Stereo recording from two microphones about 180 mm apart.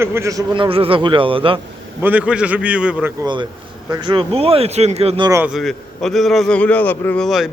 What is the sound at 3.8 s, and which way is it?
Speech, 25° right (ahead or behind).